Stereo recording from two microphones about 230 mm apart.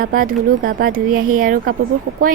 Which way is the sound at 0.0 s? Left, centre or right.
Right.